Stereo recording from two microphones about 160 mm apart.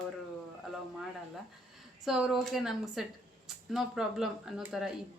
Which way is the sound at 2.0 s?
Centre (ahead or behind).